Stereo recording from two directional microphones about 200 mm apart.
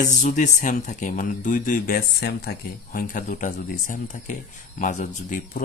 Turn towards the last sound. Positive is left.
turn(degrees=40)  # may be behind; listen again after turning